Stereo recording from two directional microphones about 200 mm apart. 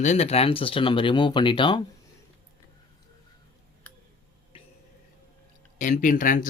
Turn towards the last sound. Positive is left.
turn(degrees=40)  # may be behind; listen again after turning